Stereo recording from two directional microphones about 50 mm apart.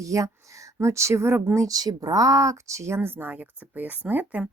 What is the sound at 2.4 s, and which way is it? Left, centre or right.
Speech, right.